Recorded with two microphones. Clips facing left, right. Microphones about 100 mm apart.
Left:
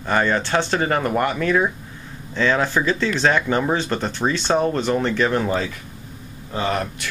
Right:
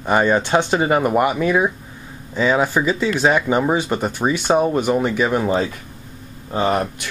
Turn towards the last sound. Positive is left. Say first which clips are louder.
# right 4 dB
turn(degrees=-20)  # may be behind; listen again after turning